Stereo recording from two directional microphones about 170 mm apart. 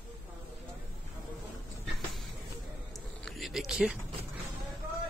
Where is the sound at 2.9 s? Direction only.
Centre (ahead or behind).